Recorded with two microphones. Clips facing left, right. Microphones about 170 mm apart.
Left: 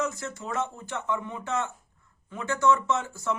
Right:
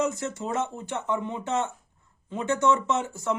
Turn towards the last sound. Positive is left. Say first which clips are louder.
# right 2 dB
turn(degrees=-20)  # may be behind; listen again after turning